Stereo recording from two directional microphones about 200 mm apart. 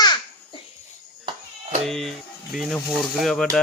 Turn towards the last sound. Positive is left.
turn(degrees=0)  # may be behind; listen again after turning